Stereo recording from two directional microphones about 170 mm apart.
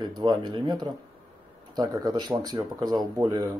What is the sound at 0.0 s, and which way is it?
Speech, 25° right (ahead or behind).